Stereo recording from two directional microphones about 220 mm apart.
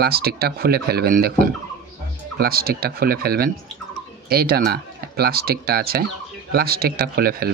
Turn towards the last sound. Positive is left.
turn(degrees=-45)  # may be behind; listen again after turning